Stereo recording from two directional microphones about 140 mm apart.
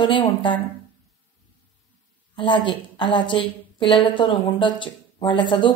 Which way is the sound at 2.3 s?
35° left (ahead or behind).